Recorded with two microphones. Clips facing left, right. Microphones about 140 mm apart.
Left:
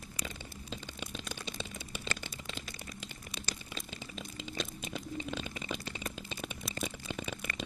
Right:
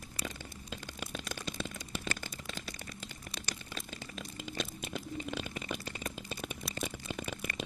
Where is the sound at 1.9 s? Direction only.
45° right (ahead or behind).